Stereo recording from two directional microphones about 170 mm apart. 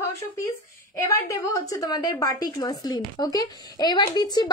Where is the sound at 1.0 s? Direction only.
20° left (ahead or behind).